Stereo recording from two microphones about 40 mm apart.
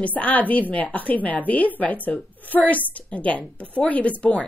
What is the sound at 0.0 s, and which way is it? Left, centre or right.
A woman's voice, left.